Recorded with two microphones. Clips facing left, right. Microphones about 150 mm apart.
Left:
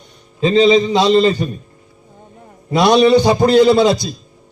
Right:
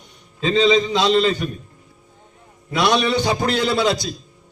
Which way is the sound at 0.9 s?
40° left (ahead or behind).